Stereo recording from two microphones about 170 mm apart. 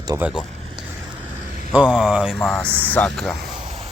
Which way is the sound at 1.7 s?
5° right (ahead or behind).